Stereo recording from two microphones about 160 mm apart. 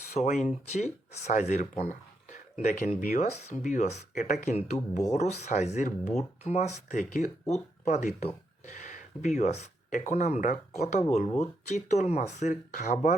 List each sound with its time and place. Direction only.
0.1 s speech: 45° left (ahead or behind)